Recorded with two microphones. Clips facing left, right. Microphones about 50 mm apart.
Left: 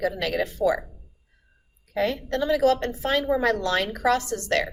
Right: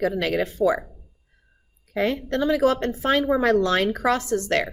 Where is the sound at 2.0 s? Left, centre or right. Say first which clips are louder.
Right 2 dB; right.